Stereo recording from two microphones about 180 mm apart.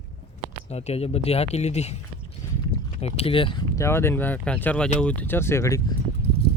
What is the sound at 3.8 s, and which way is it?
Speech, 15° left (ahead or behind).